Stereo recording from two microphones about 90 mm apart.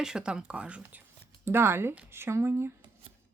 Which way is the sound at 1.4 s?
25° right (ahead or behind).